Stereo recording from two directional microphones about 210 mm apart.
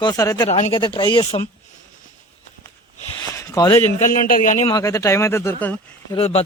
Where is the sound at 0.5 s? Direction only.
30° left (ahead or behind).